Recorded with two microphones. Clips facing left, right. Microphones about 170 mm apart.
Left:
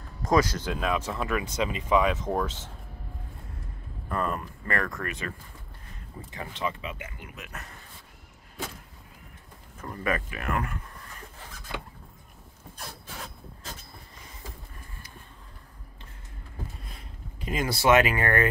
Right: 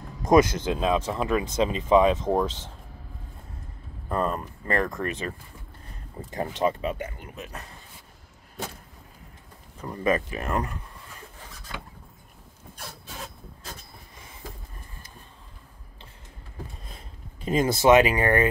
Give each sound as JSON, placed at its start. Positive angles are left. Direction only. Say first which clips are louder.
{"t": 0.2, "sound": "speech", "louder": "right 5 dB", "side_deg": -20}
{"t": 4.1, "sound": "speech", "louder": "right 3 dB", "side_deg": -30}
{"t": 6.6, "sound": "speech", "louder": "right 7 dB", "side_deg": -40}
{"t": 9.9, "sound": "speech", "louder": "right 5 dB", "side_deg": -25}
{"t": 17.5, "sound": "speech", "louder": "right 4 dB", "side_deg": -25}